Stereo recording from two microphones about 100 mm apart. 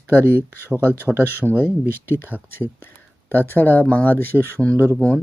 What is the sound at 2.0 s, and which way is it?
Speech, 25° left (ahead or behind).